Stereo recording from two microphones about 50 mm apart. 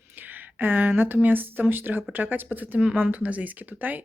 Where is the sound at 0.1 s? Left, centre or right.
Right.